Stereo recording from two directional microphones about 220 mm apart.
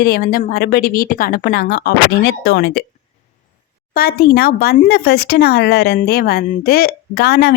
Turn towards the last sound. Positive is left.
turn(degrees=45)  # may be behind; listen again after turning